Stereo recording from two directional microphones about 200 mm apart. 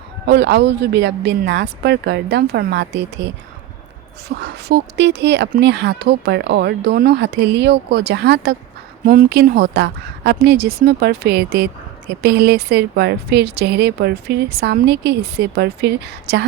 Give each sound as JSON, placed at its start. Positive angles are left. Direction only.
{"t": 0.3, "sound": "speech", "side_deg": -60}
{"t": 4.4, "sound": "a woman's voice", "side_deg": -55}